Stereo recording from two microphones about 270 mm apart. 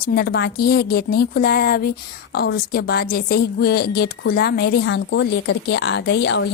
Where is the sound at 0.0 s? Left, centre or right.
Left.